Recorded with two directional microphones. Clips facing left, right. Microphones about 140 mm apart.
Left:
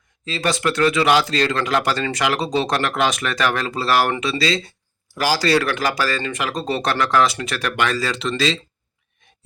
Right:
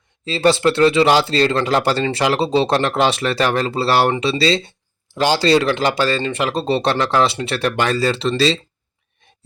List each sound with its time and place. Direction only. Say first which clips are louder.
0.3 s a man's voice: right 6 dB; 30° right (ahead or behind)